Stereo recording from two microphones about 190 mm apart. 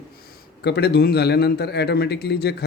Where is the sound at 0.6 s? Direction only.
60° left (ahead or behind).